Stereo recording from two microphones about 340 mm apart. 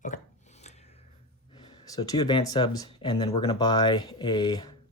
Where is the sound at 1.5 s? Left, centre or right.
Centre.